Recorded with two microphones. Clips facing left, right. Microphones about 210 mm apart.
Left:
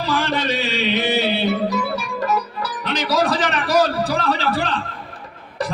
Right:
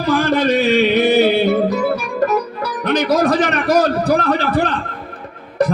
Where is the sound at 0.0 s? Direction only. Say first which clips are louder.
Right 6 dB; 55° right (ahead or behind).